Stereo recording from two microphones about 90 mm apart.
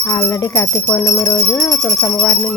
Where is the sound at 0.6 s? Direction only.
25° left (ahead or behind).